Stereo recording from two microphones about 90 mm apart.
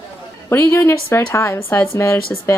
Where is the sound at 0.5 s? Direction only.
25° left (ahead or behind).